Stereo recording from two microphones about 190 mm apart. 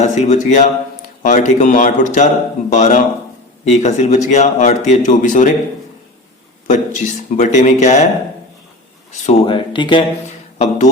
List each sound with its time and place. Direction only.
0.0 s a man's voice: 35° left (ahead or behind)
6.7 s a man's voice: 40° left (ahead or behind)
9.1 s speech: 35° left (ahead or behind)
10.6 s a man's voice: 40° left (ahead or behind)